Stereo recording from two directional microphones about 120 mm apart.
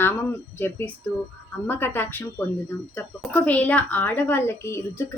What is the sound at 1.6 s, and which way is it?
Speech, 20° left (ahead or behind).